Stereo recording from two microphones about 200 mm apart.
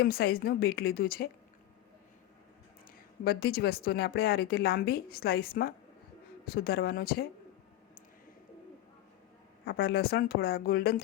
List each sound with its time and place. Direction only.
0.0 s a woman's voice: 50° left (ahead or behind)
3.2 s a woman's voice: 50° left (ahead or behind)
9.6 s a woman's voice: 50° left (ahead or behind)